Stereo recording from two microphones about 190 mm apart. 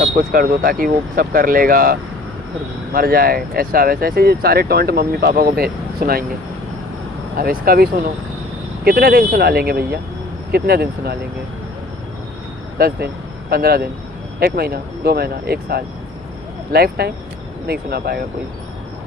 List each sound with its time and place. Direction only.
0.3 s speech: 50° right (ahead or behind)
7.3 s speech: 50° right (ahead or behind)
13.5 s speech: 55° right (ahead or behind)